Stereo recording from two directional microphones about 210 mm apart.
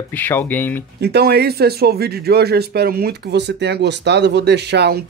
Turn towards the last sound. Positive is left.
turn(degrees=-50)  # may be behind; listen again after turning